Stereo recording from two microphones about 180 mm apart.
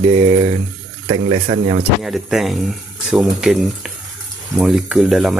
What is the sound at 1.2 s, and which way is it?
Speech, 40° right (ahead or behind).